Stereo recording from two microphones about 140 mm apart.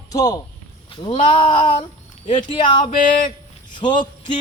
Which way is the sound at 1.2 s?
40° left (ahead or behind).